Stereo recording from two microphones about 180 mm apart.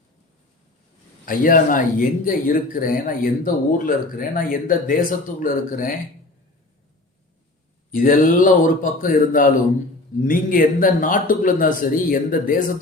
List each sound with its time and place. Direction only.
1.2 s speech: 50° left (ahead or behind)
7.9 s speech: 50° left (ahead or behind)